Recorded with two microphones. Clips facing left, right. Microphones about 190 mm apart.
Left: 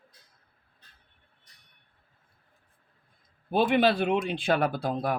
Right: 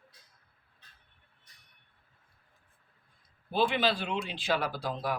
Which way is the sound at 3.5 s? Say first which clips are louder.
Left 5 dB; 55° left (ahead or behind).